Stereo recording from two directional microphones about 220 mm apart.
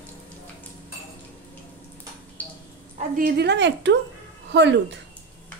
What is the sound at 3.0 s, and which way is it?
A woman's voice, 40° right (ahead or behind).